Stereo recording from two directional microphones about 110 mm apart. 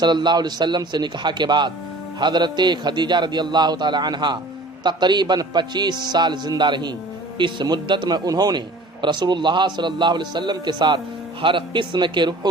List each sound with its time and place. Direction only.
0.0 s a man's voice: 40° right (ahead or behind)